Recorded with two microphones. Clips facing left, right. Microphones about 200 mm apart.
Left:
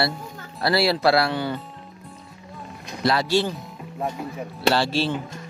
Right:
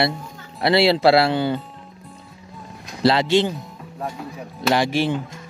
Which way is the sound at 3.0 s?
20° right (ahead or behind).